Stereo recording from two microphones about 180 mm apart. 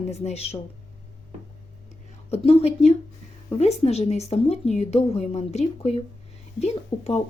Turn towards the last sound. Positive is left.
turn(degrees=35)  # may be behind; listen again after turning